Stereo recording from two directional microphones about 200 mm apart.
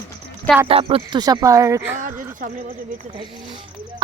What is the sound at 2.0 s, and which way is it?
Speech, 40° right (ahead or behind).